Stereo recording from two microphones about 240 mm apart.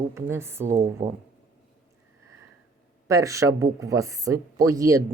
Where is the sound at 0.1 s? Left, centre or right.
Centre.